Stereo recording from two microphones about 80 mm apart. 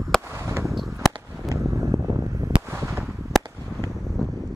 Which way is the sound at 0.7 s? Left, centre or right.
Centre.